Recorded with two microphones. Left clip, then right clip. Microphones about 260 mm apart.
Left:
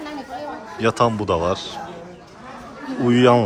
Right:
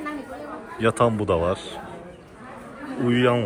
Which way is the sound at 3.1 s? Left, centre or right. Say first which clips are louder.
Left 6 dB; centre.